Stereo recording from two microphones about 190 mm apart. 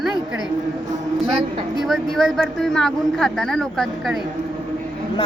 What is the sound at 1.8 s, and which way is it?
Speech, centre (ahead or behind).